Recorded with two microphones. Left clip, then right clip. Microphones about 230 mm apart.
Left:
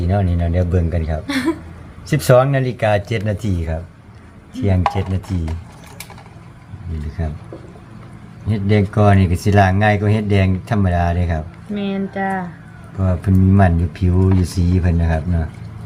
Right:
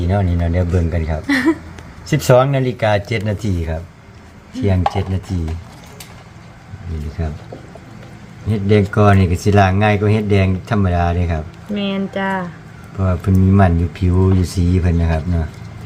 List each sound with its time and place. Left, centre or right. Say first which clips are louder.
0.0 s speech: right 1 dB; centre
1.3 s speech: right 5 dB; right
2.0 s speech: right 1 dB; centre
7.2 s speech: right 1 dB; centre
8.4 s speech: right 3 dB; centre
11.8 s speech: right 1 dB; right
13.0 s speech: right 1 dB; centre